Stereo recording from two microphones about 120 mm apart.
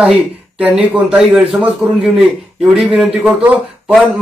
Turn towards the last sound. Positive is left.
turn(degrees=-10)  # may be behind; listen again after turning